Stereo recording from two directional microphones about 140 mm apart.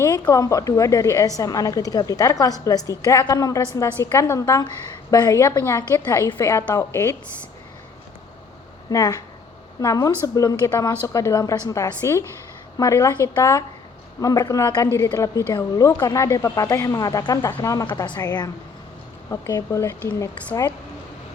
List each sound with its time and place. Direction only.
0.0 s a woman's voice: 25° left (ahead or behind)
8.9 s a woman's voice: 25° left (ahead or behind)
17.8 s a woman's voice: 35° left (ahead or behind)